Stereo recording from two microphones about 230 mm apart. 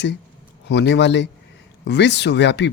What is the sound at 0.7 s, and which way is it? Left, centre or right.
Speech, left.